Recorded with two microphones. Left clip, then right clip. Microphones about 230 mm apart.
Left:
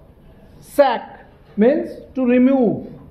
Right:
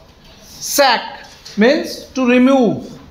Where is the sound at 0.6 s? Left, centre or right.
Centre.